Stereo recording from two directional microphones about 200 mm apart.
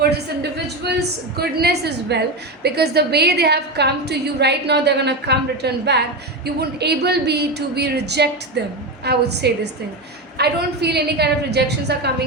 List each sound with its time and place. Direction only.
0.9 s a woman's voice: 55° right (ahead or behind)